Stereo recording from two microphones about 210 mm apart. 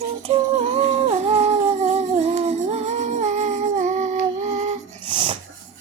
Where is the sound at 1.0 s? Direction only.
30° right (ahead or behind).